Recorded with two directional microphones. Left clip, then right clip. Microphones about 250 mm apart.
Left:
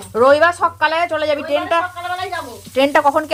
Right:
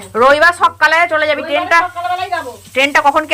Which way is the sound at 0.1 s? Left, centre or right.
Left.